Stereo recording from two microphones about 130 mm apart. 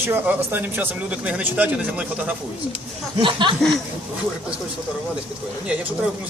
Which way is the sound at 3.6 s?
Centre (ahead or behind).